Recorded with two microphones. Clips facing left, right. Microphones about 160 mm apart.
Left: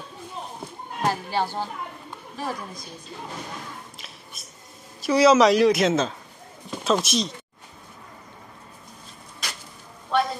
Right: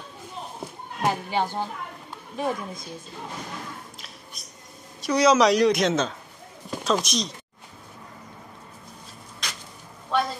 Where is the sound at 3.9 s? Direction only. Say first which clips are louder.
Even; centre (ahead or behind).